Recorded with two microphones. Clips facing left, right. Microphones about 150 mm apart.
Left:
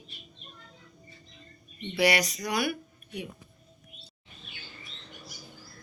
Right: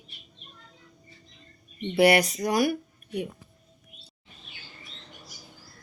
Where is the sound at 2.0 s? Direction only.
55° right (ahead or behind).